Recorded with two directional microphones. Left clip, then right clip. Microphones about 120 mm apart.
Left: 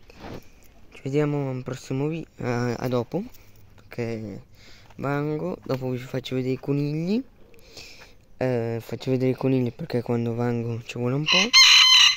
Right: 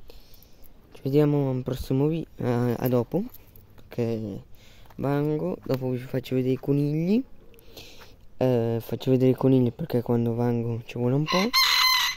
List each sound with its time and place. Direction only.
0.9 s speech: 55° right (ahead or behind); by 2.4 s 90° right
2.4 s speech: 45° right (ahead or behind)
3.9 s speech: 70° right (ahead or behind)
5.0 s speech: 50° right (ahead or behind)
5.8 s speech: 30° right (ahead or behind)
6.2 s speech: 40° right (ahead or behind)
7.7 s a sound: 55° right (ahead or behind)
8.4 s speech: 55° right (ahead or behind)
9.9 s speech: 35° right (ahead or behind)
11.1 s chicken: 45° right (ahead or behind)